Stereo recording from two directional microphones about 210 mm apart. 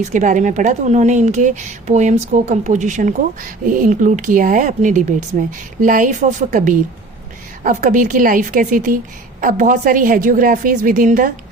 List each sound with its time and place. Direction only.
0.0 s speech: 35° right (ahead or behind)